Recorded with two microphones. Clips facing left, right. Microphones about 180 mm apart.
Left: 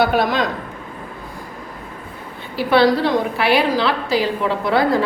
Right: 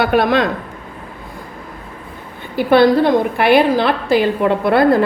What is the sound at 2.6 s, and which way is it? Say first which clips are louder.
A woman's voice: right 4 dB; 50° right (ahead or behind).